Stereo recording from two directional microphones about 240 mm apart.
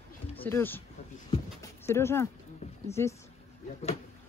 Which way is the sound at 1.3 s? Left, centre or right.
Centre.